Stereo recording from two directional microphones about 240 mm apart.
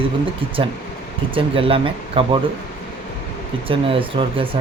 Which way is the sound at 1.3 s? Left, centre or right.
Right.